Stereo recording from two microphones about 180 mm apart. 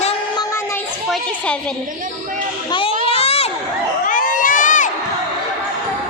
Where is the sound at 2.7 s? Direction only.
30° left (ahead or behind).